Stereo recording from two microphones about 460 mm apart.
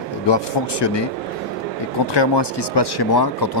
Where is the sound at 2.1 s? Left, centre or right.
Left.